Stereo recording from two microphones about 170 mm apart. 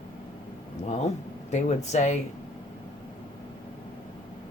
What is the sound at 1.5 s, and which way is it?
Speech, 40° left (ahead or behind).